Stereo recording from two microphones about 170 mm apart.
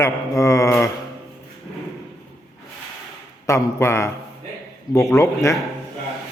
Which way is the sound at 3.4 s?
15° left (ahead or behind).